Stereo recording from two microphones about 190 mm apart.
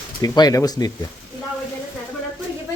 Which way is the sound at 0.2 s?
20° left (ahead or behind).